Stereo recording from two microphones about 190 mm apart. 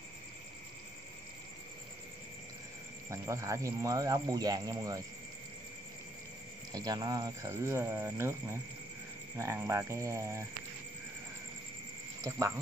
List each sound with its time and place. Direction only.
3.1 s speech: 15° right (ahead or behind)
6.7 s speech: 20° right (ahead or behind)
12.2 s a sound: 15° right (ahead or behind)